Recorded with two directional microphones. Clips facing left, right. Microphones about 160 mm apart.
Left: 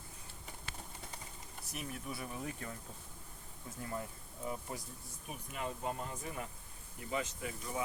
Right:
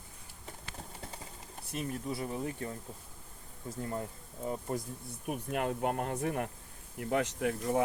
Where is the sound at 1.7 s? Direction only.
30° right (ahead or behind).